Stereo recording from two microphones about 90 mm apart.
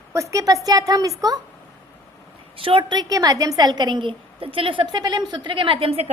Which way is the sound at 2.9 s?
50° right (ahead or behind).